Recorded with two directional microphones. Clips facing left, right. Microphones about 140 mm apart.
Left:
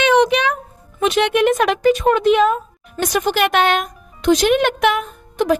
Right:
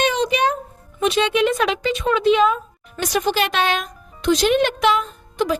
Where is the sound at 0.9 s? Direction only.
55° left (ahead or behind).